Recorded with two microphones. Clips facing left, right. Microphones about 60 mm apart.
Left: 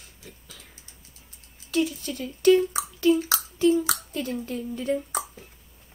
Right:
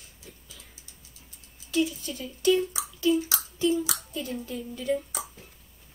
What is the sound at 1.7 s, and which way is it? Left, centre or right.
Speech, left.